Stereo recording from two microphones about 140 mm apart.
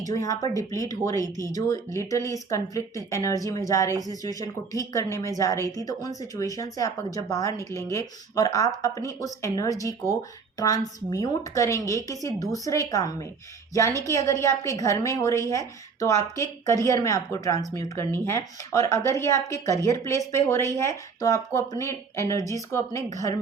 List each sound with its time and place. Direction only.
0.1 s a woman's voice: 25° left (ahead or behind)